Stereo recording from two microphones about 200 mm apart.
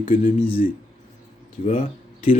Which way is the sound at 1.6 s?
40° left (ahead or behind).